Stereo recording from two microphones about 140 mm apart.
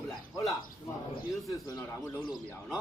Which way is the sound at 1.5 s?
20° left (ahead or behind).